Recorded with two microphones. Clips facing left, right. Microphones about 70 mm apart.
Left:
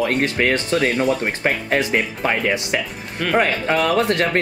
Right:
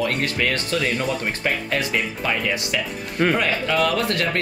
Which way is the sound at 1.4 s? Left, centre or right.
Left.